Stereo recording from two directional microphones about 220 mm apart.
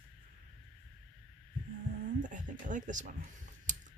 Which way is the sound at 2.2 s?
35° right (ahead or behind).